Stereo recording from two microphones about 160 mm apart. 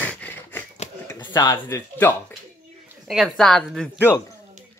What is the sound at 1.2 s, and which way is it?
Speech, 25° left (ahead or behind).